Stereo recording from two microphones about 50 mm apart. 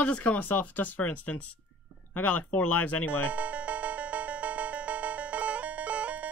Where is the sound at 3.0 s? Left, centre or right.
Left.